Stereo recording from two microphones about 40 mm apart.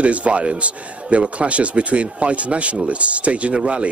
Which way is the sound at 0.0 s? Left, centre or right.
Right.